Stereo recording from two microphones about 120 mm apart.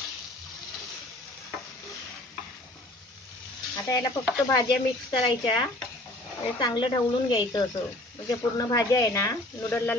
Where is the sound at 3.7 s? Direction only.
25° left (ahead or behind).